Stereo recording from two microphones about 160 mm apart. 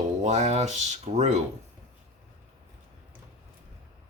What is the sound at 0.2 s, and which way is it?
Speech, 45° right (ahead or behind).